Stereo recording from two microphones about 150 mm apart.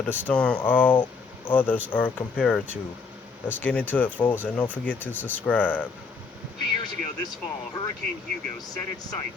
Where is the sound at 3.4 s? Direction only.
10° left (ahead or behind).